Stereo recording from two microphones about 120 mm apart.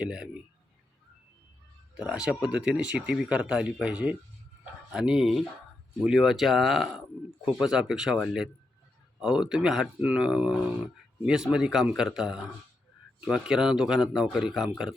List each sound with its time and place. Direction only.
0.0 s speech: 5° right (ahead or behind)
2.0 s a man's voice: 10° right (ahead or behind)